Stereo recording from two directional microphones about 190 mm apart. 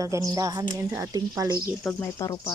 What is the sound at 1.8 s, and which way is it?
Speech, 5° left (ahead or behind).